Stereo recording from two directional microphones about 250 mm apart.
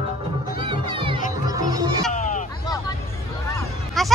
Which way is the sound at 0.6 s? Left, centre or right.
Centre.